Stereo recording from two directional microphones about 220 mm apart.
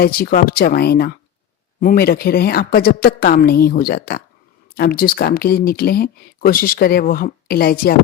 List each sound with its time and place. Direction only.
0.0 s speech: 45° left (ahead or behind)